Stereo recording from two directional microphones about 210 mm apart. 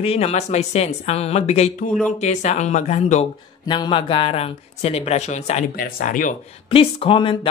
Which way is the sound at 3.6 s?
20° left (ahead or behind).